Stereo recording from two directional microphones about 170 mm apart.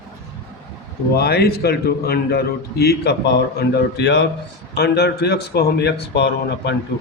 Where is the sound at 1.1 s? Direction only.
70° left (ahead or behind).